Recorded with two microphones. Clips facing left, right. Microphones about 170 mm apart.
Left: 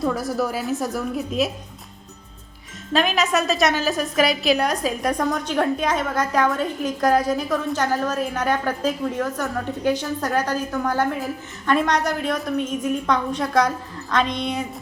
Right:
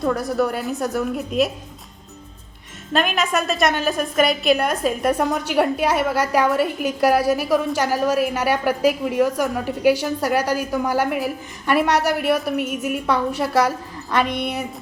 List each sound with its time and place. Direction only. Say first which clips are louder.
0.0 s a woman's voice: right 2 dB; centre (ahead or behind)
2.9 s a woman's voice: even; centre (ahead or behind)